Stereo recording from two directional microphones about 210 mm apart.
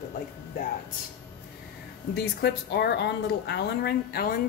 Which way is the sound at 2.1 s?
50° left (ahead or behind).